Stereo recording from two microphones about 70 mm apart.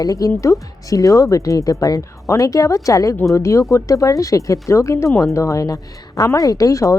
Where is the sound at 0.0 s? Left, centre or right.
Left.